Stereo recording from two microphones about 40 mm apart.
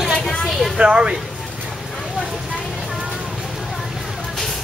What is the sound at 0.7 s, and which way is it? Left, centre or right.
Speech, right.